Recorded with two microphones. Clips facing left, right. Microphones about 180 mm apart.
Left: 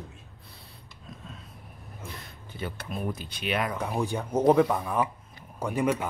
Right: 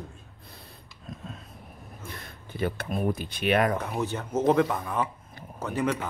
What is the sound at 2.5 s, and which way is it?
Speech, 55° right (ahead or behind).